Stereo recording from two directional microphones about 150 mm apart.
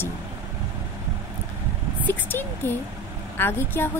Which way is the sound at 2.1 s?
15° left (ahead or behind).